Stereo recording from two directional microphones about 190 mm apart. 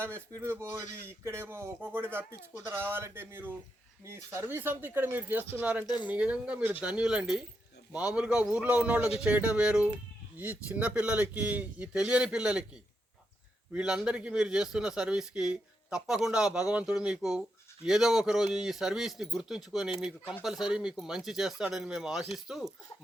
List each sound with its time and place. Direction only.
0.0 s a man's voice: 15° right (ahead or behind)
5.8 s speech: 20° left (ahead or behind)
6.1 s a man's voice: 5° right (ahead or behind)
13.7 s speech: 5° right (ahead or behind)